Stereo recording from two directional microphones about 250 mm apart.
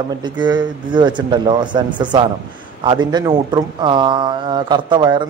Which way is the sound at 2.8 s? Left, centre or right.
Centre.